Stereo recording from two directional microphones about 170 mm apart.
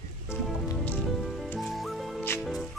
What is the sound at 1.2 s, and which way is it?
Music, centre (ahead or behind).